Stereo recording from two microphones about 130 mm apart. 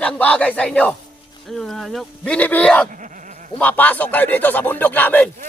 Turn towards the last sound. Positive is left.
turn(degrees=15)  # may be behind; listen again after turning